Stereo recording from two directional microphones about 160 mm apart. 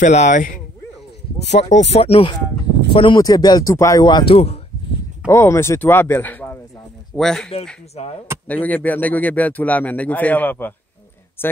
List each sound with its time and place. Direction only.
0.0 s speech: 50° left (ahead or behind)
5.3 s speech: 15° left (ahead or behind)
7.9 s speech: 40° left (ahead or behind)
8.5 s speech: 10° left (ahead or behind)